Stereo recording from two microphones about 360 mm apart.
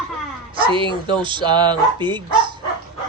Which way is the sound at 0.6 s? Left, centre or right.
Centre.